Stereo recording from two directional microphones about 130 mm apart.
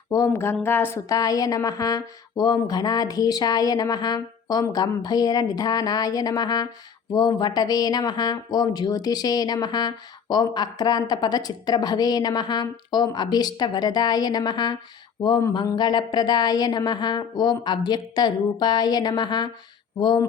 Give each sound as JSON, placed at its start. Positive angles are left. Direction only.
{"t": 0.1, "sound": "speech", "side_deg": 25}